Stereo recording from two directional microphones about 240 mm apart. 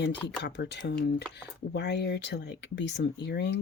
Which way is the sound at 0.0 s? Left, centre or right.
Left.